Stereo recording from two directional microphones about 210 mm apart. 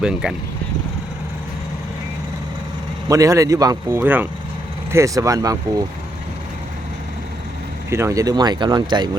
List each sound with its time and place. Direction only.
0.0 s speech: 5° right (ahead or behind)
3.1 s speech: 15° right (ahead or behind)
7.9 s speech: 15° right (ahead or behind)